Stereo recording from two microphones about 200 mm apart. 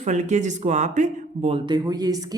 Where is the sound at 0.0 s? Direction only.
35° right (ahead or behind).